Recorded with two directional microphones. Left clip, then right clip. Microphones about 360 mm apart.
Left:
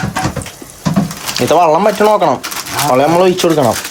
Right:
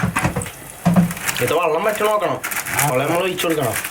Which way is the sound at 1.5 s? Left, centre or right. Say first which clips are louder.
Left 9 dB; centre.